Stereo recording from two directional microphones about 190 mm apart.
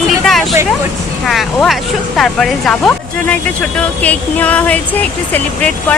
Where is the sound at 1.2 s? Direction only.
Centre (ahead or behind).